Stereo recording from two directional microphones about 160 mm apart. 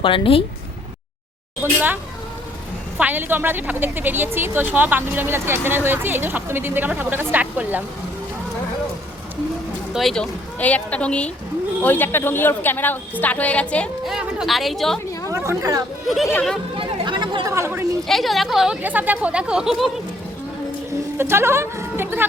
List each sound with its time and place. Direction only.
0.0 s speech: 35° left (ahead or behind)
1.6 s a woman's voice: 10° right (ahead or behind)
3.0 s a woman's voice: 10° right (ahead or behind)
9.9 s a woman's voice: centre (ahead or behind)
15.3 s speech: 20° right (ahead or behind)
16.0 s a woman's voice: centre (ahead or behind)
16.7 s speech: 30° right (ahead or behind)
18.1 s a woman's voice: centre (ahead or behind)
21.2 s a woman's voice: 15° right (ahead or behind)